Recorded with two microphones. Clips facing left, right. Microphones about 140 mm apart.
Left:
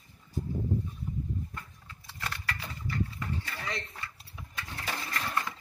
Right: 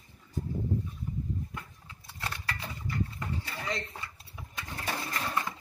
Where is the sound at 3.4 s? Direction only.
20° right (ahead or behind).